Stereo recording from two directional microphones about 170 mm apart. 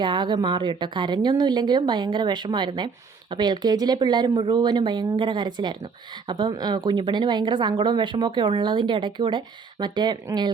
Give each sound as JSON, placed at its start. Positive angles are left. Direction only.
{"t": 0.0, "sound": "a woman's voice", "side_deg": -25}